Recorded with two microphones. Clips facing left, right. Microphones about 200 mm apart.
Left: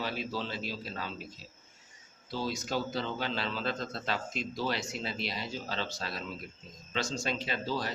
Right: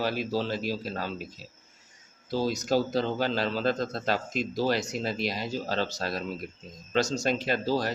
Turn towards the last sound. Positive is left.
turn(degrees=-40)  # may be behind; listen again after turning